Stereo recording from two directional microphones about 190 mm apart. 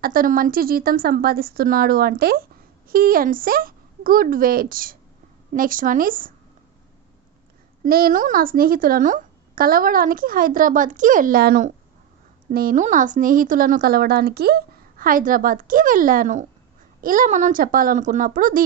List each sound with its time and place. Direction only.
0.0 s speech: 50° right (ahead or behind)
7.8 s speech: 50° right (ahead or behind)